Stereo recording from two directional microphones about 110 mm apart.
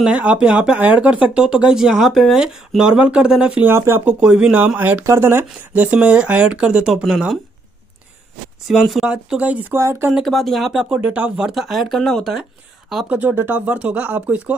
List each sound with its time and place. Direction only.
0.0 s speech: 10° right (ahead or behind)
3.7 s speech: 25° right (ahead or behind)
4.0 s speech: 10° right (ahead or behind)
8.6 s speech: centre (ahead or behind)
9.8 s speech: 25° right (ahead or behind)
10.1 s speech: centre (ahead or behind)
13.1 s speech: 15° right (ahead or behind)